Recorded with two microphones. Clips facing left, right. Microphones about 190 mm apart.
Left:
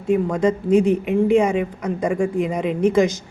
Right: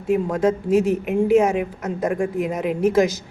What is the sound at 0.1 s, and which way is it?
Speech, 5° right (ahead or behind).